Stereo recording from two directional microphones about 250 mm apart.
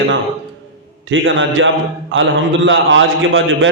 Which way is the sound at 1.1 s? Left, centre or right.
Right.